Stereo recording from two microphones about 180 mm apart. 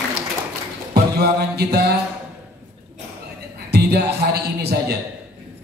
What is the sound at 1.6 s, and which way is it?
Speech, 60° right (ahead or behind).